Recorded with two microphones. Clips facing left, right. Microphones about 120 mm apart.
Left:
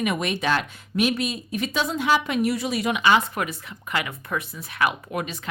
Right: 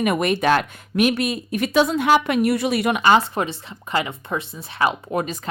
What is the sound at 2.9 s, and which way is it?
Speech, 40° right (ahead or behind).